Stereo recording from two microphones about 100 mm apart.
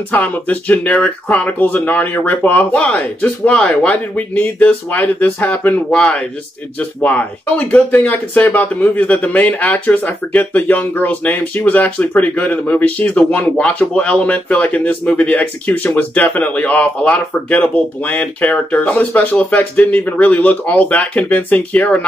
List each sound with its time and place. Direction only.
0.1 s speech: 15° left (ahead or behind)